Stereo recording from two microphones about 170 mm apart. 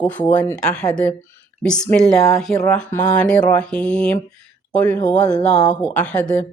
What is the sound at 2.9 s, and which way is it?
Speech, 20° left (ahead or behind).